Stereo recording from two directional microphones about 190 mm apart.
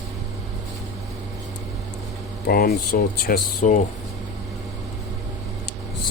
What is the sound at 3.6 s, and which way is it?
Speech, 40° left (ahead or behind).